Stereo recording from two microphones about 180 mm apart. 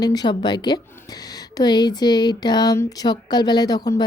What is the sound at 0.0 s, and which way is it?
A woman's voice, 20° left (ahead or behind).